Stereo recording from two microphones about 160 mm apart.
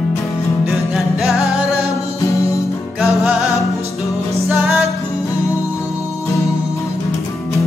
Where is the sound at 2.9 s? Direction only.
Centre (ahead or behind).